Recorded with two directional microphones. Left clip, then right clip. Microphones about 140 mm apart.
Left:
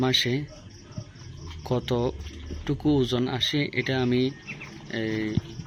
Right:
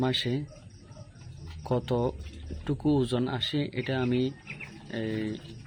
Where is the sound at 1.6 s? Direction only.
30° right (ahead or behind).